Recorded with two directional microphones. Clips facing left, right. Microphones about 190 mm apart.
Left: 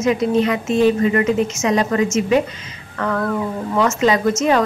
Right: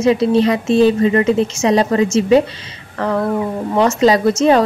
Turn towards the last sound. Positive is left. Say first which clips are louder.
# right 4 dB
turn(degrees=-35)  # may be behind; listen again after turning